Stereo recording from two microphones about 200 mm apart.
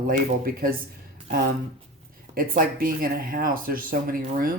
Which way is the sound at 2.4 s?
45° right (ahead or behind).